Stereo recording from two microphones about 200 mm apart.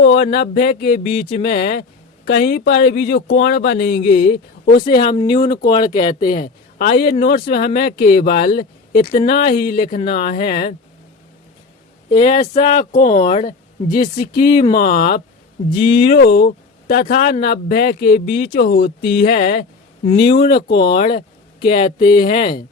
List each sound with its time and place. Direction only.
0.0 s speech: 55° left (ahead or behind)
5.0 s speech: 20° left (ahead or behind)
6.4 s speech: 45° left (ahead or behind)
12.1 s speech: 35° left (ahead or behind); by 20.9 s 55° left (ahead or behind)
20.9 s speech: 25° left (ahead or behind)